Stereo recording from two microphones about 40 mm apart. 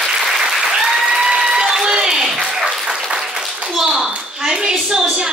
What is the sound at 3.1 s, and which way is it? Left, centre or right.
Applause, centre.